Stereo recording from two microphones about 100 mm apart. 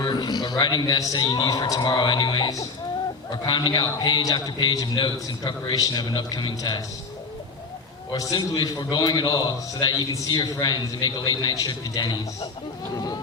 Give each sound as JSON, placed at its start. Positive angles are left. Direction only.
{"t": 0.0, "sound": "a sound", "side_deg": 45}
{"t": 0.6, "sound": "a man's voice", "side_deg": 40}
{"t": 8.1, "sound": "a man's voice", "side_deg": 40}